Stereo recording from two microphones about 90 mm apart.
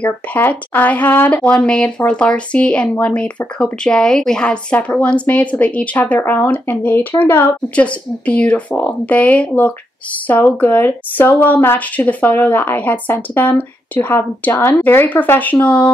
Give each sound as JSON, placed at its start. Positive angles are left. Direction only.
{"t": 0.0, "sound": "speech", "side_deg": 15}